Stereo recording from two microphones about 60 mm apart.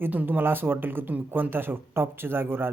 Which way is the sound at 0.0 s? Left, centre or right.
Right.